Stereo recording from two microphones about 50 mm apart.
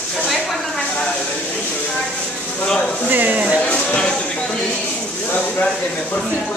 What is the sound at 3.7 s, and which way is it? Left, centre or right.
Speech, centre.